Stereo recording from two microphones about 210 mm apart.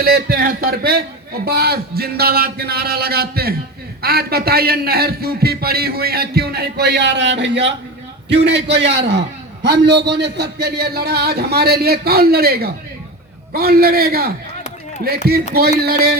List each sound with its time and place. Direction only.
0.0 s a man's voice: 45° right (ahead or behind)